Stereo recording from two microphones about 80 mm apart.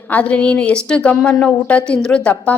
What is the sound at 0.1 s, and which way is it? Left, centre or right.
A woman's voice, centre.